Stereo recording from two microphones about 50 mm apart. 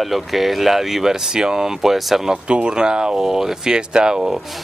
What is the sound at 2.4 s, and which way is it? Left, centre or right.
Speech, right.